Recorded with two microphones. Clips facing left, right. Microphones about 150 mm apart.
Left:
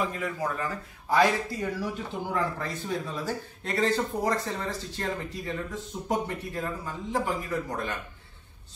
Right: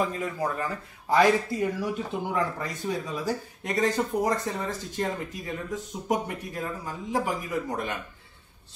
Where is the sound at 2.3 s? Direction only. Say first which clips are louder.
Left 1 dB; 15° right (ahead or behind).